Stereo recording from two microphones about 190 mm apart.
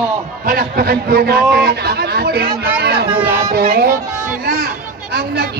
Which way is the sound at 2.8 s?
60° right (ahead or behind).